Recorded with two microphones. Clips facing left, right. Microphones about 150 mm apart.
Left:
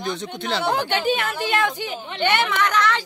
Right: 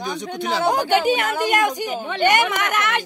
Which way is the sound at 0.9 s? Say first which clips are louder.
Right 4 dB; 45° right (ahead or behind).